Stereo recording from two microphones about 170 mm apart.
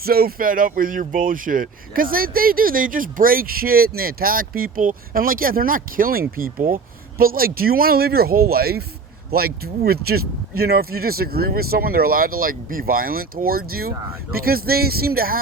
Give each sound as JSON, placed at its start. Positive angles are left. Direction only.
{"t": 0.0, "sound": "speech", "side_deg": -60}